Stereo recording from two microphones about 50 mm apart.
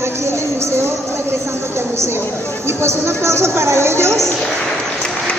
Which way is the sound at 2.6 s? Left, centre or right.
Right.